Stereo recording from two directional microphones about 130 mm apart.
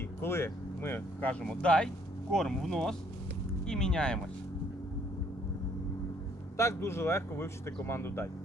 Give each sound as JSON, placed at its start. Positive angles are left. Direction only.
{"t": 0.2, "sound": "speech", "side_deg": 20}
{"t": 6.6, "sound": "speech", "side_deg": 20}